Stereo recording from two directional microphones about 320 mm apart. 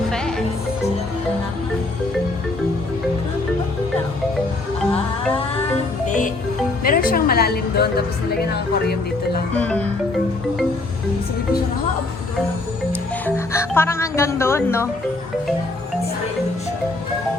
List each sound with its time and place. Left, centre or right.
0.1 s music: centre
6.1 s music: left
6.8 s a sound: left
8.5 s speech: left
9.6 s music: centre
13.2 s music: centre